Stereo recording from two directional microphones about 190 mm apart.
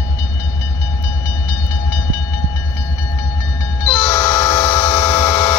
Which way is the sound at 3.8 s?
20° left (ahead or behind).